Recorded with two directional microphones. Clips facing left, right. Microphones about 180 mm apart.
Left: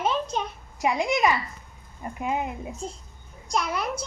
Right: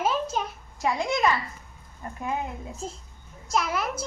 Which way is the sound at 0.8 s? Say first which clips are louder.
Left 2 dB; 15° left (ahead or behind).